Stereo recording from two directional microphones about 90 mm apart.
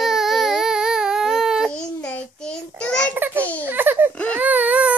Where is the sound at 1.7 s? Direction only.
15° left (ahead or behind).